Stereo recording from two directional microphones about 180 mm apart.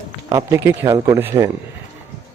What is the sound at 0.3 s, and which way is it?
A man's voice, 15° right (ahead or behind).